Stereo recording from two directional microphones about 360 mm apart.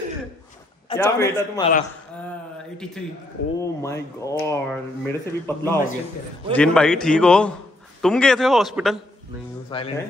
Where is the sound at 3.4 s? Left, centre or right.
Left.